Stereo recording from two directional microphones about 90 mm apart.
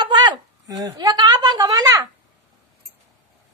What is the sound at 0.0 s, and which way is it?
A woman's voice, 55° right (ahead or behind).